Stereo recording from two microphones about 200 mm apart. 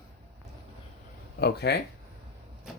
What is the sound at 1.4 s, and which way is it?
Speech, 55° left (ahead or behind).